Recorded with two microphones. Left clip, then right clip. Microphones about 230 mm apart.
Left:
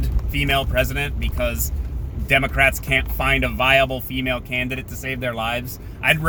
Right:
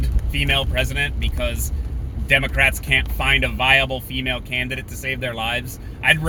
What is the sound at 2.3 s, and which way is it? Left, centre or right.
Speech, centre.